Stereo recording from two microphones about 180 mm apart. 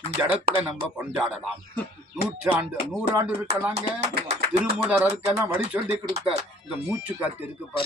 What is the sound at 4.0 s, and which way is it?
Speech, 35° right (ahead or behind).